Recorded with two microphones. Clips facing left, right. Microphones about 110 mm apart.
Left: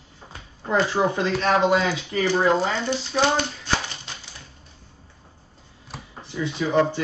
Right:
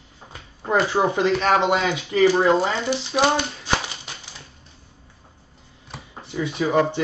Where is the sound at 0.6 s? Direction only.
15° right (ahead or behind).